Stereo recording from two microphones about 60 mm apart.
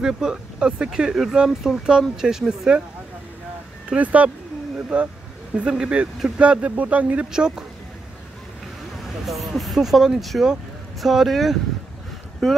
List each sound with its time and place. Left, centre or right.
0.0 s speech: centre
3.9 s speech: right
7.3 s speech: centre
9.0 s speech: centre